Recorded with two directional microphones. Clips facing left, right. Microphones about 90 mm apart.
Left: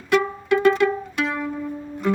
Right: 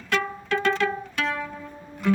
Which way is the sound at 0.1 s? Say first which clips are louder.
Left 6 dB; 10° left (ahead or behind).